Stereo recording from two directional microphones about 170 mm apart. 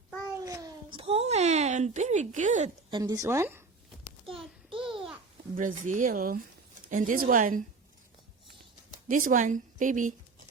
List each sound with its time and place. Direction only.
0.4 s a sound: 20° right (ahead or behind)
0.9 s a sound: 35° right (ahead or behind)
2.9 s a woman's voice: 20° right (ahead or behind)
4.8 s babbling: 5° right (ahead or behind)
5.5 s speech: 50° right (ahead or behind)
9.0 s speech: 50° right (ahead or behind)